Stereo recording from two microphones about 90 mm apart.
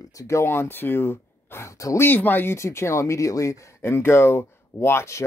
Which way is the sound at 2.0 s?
20° left (ahead or behind).